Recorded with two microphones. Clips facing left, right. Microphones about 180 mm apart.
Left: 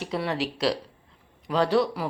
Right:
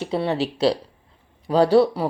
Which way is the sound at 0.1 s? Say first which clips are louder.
Right 5 dB; 30° right (ahead or behind).